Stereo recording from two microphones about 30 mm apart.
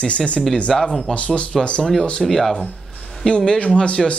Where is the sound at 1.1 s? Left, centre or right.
Left.